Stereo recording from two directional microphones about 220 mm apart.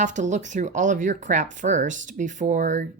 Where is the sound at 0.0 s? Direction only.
35° right (ahead or behind).